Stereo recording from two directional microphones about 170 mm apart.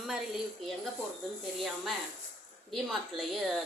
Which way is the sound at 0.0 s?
Centre (ahead or behind).